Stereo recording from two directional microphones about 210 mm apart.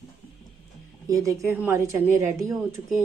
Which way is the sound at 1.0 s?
15° right (ahead or behind).